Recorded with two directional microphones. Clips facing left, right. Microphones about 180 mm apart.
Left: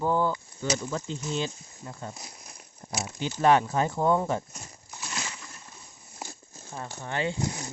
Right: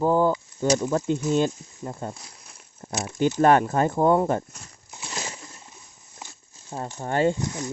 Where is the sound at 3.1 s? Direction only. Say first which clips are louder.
Right 4 dB; 50° right (ahead or behind).